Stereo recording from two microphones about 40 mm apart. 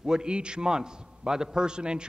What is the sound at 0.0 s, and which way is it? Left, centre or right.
A man's voice, centre.